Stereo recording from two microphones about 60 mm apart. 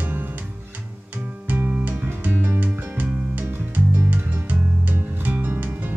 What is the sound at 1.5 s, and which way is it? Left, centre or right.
Music, right.